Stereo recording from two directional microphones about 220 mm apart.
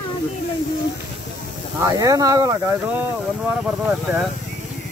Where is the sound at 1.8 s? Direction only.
15° right (ahead or behind).